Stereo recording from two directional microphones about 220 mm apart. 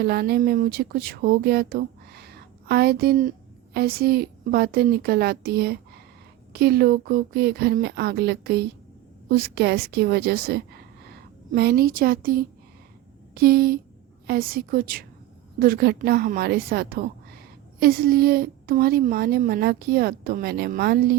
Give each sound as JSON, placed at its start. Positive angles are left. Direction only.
{"t": 0.0, "sound": "a woman's voice", "side_deg": -45}